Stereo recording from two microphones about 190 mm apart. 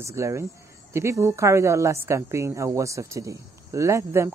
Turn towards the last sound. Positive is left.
turn(degrees=-15)  # may be behind; listen again after turning